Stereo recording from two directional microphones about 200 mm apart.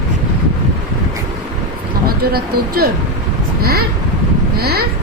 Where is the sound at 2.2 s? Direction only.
50° right (ahead or behind).